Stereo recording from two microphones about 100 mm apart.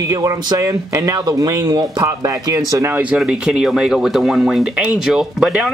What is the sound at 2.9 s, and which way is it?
Speech, 15° right (ahead or behind).